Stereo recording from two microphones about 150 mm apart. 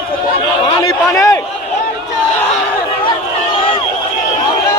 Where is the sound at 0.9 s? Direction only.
20° left (ahead or behind).